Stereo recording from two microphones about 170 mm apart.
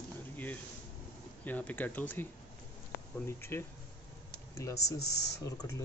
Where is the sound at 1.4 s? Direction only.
10° left (ahead or behind).